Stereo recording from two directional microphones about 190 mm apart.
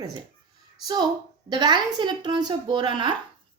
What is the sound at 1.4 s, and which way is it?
A woman's voice, 25° right (ahead or behind).